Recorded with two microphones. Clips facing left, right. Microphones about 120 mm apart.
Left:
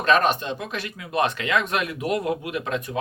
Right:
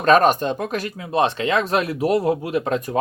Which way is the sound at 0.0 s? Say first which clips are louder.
Right 5 dB; 45° right (ahead or behind).